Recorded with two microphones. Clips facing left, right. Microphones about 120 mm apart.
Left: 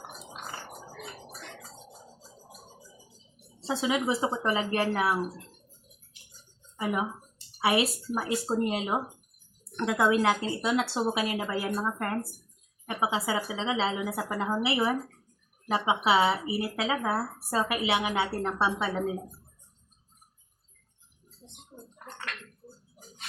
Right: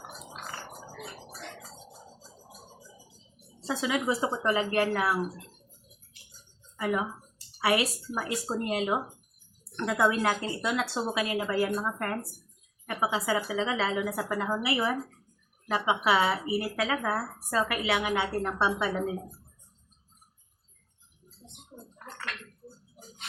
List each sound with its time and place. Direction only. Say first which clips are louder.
3.7 s speech: left 1 dB; 25° left (ahead or behind)
7.6 s speech: left 1 dB; 25° left (ahead or behind)
12.9 s speech: even; 25° left (ahead or behind)